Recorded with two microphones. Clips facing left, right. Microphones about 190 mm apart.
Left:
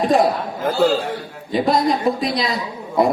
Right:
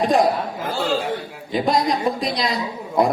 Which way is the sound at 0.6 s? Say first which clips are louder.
Left 8 dB; 45° left (ahead or behind).